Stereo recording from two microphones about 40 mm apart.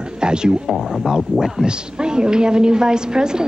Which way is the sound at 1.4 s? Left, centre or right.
Centre.